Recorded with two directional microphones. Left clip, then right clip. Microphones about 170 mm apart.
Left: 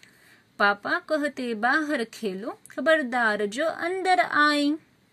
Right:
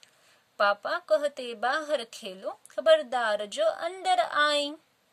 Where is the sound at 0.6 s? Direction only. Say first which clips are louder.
Left 3 dB; 35° right (ahead or behind).